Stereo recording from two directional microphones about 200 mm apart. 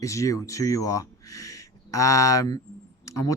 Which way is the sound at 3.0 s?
15° left (ahead or behind).